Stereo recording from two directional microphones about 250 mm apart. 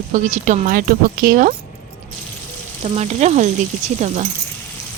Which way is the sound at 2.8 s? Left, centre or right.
Right.